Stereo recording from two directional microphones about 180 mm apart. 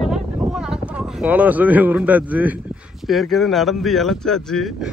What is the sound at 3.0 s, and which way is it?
Speech, centre (ahead or behind).